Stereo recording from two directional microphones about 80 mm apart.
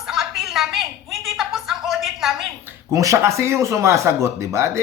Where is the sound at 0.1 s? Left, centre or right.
Centre.